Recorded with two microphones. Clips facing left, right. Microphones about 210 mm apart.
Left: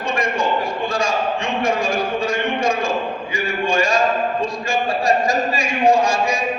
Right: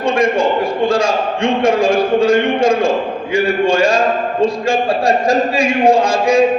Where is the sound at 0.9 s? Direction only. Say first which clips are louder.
Right 6 dB; 60° right (ahead or behind).